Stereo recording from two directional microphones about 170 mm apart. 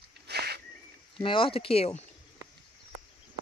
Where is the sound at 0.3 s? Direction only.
70° right (ahead or behind).